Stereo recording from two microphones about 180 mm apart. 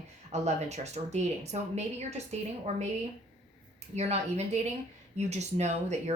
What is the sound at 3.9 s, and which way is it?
Speech, 35° right (ahead or behind).